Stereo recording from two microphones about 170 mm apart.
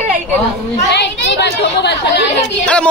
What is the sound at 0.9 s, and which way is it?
A woman's voice, 90° left.